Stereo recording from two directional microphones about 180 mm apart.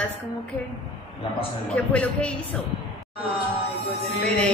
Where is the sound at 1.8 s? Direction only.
10° left (ahead or behind).